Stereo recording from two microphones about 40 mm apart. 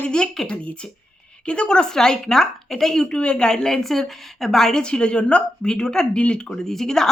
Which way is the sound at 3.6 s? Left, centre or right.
Centre.